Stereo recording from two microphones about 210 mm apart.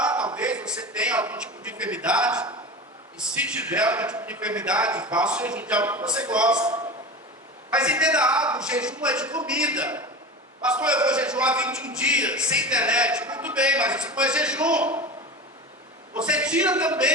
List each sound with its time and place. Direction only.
0.0 s a sound: 5° right (ahead or behind)
0.3 s a man's voice: 5° right (ahead or behind)
3.7 s a man's voice: 5° right (ahead or behind)
16.1 s a man's voice: 5° right (ahead or behind)